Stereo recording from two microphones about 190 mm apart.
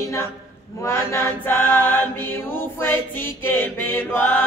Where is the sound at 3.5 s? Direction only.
10° left (ahead or behind).